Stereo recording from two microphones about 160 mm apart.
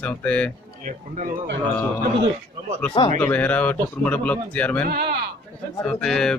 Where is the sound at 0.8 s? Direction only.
55° right (ahead or behind); by 1.6 s 75° right (ahead or behind).